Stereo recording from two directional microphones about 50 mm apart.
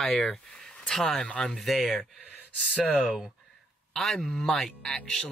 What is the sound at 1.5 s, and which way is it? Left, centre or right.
Speech, centre.